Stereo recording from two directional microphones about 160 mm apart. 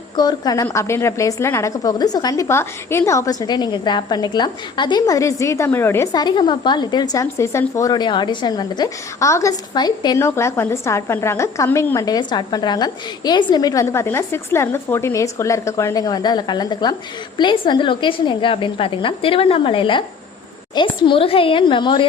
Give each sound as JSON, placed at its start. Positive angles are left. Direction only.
{"t": 0.2, "sound": "a woman's voice", "side_deg": 25}